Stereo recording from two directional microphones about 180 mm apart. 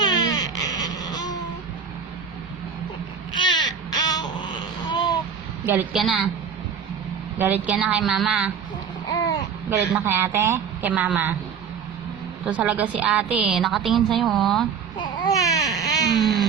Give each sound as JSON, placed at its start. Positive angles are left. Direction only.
{"t": 0.0, "sound": "baby cry", "side_deg": 20}
{"t": 3.3, "sound": "a sound", "side_deg": 25}
{"t": 5.6, "sound": "a woman's voice", "side_deg": -5}
{"t": 7.3, "sound": "a woman's voice", "side_deg": -10}
{"t": 9.6, "sound": "a man's voice", "side_deg": -10}
{"t": 12.5, "sound": "a woman's voice", "side_deg": -10}
{"t": 15.1, "sound": "baby cry", "side_deg": 20}
{"t": 16.2, "sound": "baby cry", "side_deg": 0}